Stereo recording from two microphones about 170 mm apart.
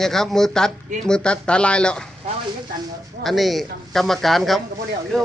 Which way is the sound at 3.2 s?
Centre (ahead or behind).